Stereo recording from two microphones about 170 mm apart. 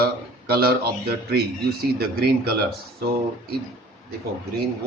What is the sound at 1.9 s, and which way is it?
Speech, 65° right (ahead or behind).